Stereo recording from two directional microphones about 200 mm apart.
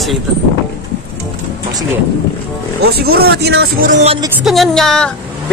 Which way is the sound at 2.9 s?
50° right (ahead or behind).